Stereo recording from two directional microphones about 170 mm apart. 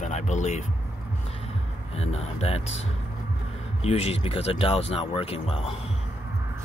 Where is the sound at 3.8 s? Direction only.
40° left (ahead or behind).